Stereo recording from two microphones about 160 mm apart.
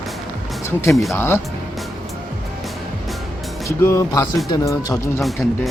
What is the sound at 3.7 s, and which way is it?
Speech, 20° left (ahead or behind).